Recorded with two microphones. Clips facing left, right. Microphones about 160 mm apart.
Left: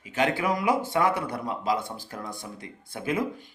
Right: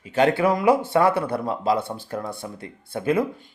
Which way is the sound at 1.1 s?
65° right (ahead or behind).